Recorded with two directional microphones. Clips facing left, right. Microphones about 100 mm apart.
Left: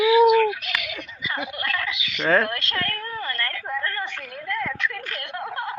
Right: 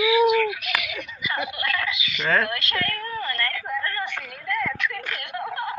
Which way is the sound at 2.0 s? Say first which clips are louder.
Left 4 dB; 45° left (ahead or behind).